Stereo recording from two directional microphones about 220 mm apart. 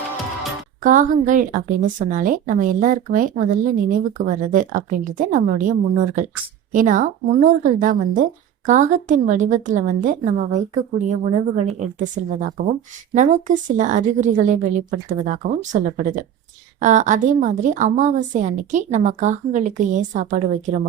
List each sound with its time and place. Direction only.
0.8 s a woman's voice: 35° right (ahead or behind)